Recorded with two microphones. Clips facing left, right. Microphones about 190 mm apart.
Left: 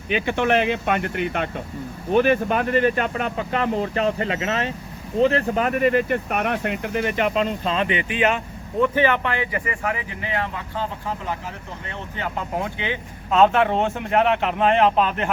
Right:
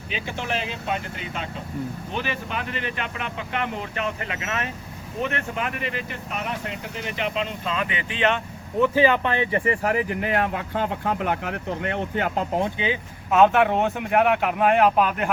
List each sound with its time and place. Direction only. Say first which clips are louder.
0.1 s speech: left 9 dB; 60° left (ahead or behind)
2.1 s speech: left 13 dB; 50° left (ahead or behind); by 8.4 s 10° left (ahead or behind)
8.8 s speech: even; 10° right (ahead or behind); by 12.3 s 55° right (ahead or behind)
12.4 s speech: right 1 dB; 25° right (ahead or behind)
12.8 s speech: right 2 dB; 10° right (ahead or behind)